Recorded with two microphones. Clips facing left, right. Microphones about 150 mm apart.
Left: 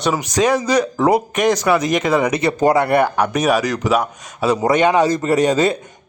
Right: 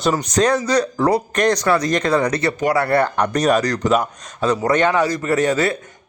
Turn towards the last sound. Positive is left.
turn(degrees=15)  # may be behind; listen again after turning